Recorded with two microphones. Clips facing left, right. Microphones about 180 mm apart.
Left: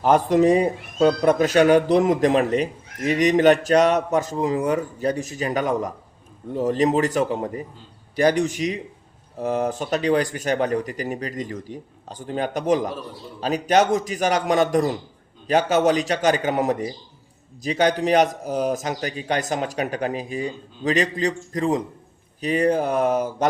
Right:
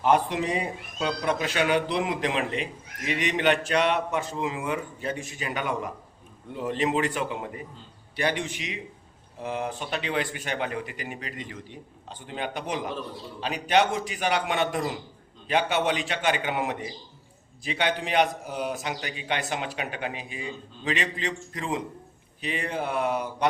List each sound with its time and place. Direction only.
0.0 s speech: 40° left (ahead or behind)